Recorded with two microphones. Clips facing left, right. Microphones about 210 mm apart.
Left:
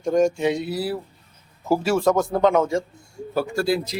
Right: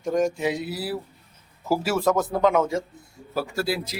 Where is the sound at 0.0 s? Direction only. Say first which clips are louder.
Left 4 dB; centre (ahead or behind).